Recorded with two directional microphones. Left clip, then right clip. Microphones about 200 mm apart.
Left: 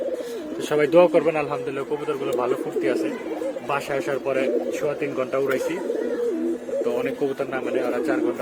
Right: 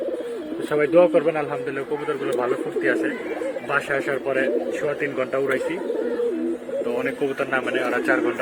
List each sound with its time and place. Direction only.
0.7 s speech: 20° left (ahead or behind)
3.9 s speech: 15° left (ahead or behind)
6.9 s speech: centre (ahead or behind)